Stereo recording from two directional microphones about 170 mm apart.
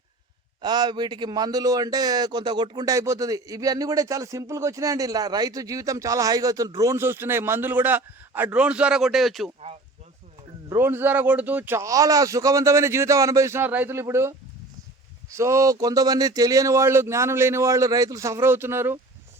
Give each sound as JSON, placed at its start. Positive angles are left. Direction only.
{"t": 0.6, "sound": "a man's voice", "side_deg": -25}
{"t": 10.7, "sound": "speech", "side_deg": -15}